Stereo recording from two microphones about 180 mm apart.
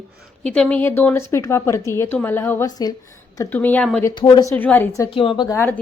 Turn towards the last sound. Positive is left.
turn(degrees=10)  # may be behind; listen again after turning